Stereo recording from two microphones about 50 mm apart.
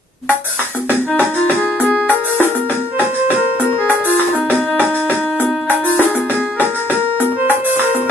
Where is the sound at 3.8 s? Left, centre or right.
Right.